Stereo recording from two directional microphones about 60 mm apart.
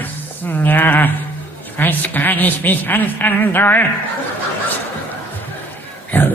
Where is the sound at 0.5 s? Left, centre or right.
Left.